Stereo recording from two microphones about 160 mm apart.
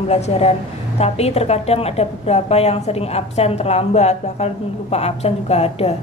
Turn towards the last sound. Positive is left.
turn(degrees=40)  # may be behind; listen again after turning